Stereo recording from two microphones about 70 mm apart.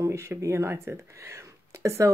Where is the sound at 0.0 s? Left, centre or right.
Right.